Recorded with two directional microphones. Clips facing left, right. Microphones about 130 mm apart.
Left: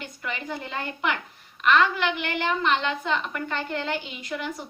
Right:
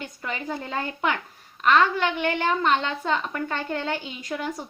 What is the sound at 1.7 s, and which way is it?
A woman's voice, 30° right (ahead or behind).